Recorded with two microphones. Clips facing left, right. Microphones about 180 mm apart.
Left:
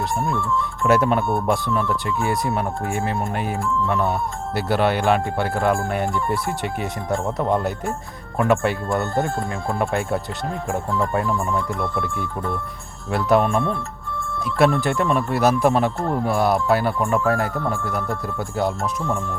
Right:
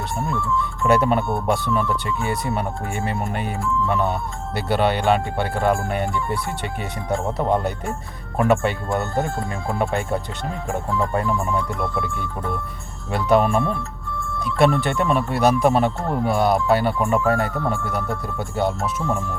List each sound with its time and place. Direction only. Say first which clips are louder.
0.3 s speech: left 1 dB; 50° left (ahead or behind)
0.9 s speech: even; centre (ahead or behind)
13.1 s speech: even; centre (ahead or behind)